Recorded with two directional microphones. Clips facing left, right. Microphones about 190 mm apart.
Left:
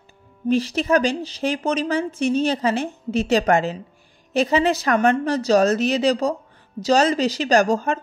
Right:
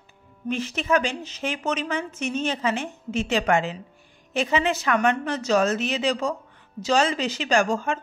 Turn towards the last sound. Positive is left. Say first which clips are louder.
# left 4 dB
turn(degrees=40)  # may be behind; listen again after turning